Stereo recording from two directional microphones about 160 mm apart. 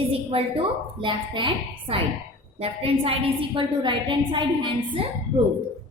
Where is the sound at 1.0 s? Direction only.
30° right (ahead or behind).